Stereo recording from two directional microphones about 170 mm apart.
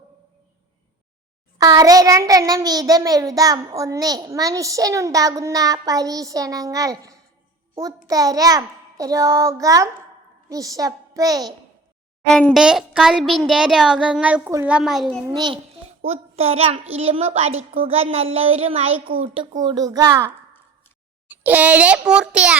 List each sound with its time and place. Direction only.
1.5 s a child's voice: 20° right (ahead or behind)
12.3 s a child's voice: 5° left (ahead or behind)
15.3 s a child's voice: 25° right (ahead or behind)
16.0 s a child's voice: 40° right (ahead or behind)
19.6 s a child's voice: 20° right (ahead or behind); by 22.5 s 5° right (ahead or behind)